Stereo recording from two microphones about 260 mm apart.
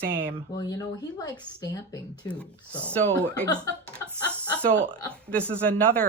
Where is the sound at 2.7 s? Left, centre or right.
Centre.